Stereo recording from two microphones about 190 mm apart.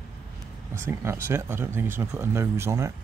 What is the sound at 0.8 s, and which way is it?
Speech, 10° right (ahead or behind).